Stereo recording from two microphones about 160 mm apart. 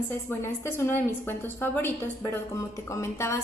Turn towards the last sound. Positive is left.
turn(degrees=15)  # may be behind; listen again after turning